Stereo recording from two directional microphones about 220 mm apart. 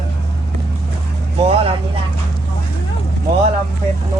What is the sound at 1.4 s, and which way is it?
Vehicle, 25° right (ahead or behind).